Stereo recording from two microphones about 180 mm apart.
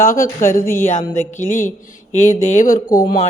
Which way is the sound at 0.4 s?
50° left (ahead or behind).